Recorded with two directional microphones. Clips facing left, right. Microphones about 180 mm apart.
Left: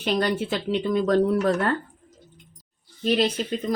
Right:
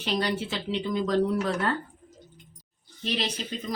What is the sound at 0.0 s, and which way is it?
Speech, 50° left (ahead or behind).